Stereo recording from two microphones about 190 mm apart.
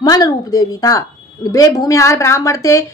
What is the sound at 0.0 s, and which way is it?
A woman's voice, 20° left (ahead or behind).